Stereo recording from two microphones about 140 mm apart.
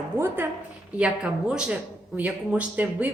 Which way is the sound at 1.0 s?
5° right (ahead or behind).